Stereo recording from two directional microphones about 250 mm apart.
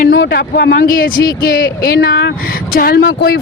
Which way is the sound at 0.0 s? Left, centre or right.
Left.